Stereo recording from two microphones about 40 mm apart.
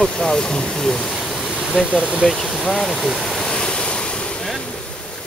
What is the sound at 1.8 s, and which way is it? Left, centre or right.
Speech, centre.